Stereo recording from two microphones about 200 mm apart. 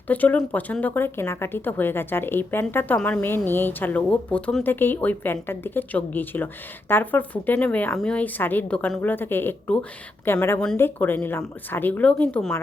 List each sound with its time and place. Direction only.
0.1 s a woman's voice: 10° left (ahead or behind)